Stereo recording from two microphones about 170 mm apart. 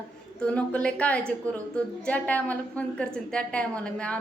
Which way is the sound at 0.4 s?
5° left (ahead or behind).